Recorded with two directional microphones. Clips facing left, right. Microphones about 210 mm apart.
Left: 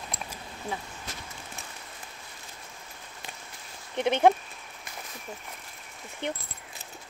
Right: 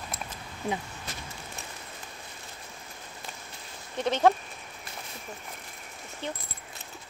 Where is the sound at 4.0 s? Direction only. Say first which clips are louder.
Left 2 dB; 15° left (ahead or behind).